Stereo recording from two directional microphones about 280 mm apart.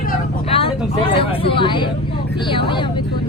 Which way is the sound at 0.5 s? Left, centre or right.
Centre.